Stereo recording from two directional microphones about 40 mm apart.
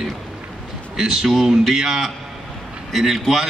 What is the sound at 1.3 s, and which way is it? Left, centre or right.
A man's voice, centre.